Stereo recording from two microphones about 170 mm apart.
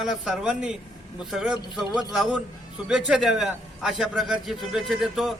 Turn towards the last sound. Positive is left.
turn(degrees=0)  # may be behind; listen again after turning